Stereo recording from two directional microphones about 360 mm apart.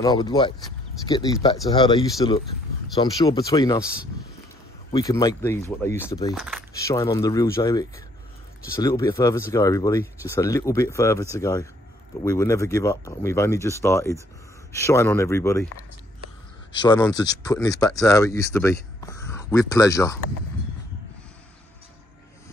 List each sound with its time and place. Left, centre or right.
0.0 s speech: centre
4.9 s speech: centre
8.8 s speech: centre
16.7 s speech: centre